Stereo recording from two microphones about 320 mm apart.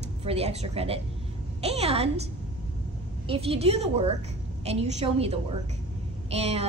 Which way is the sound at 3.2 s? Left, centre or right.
Centre.